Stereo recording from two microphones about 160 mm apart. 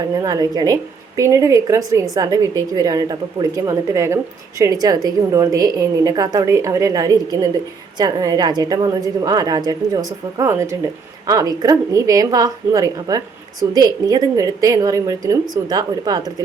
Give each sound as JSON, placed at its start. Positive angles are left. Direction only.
{"t": 0.2, "sound": "a woman's voice", "side_deg": -25}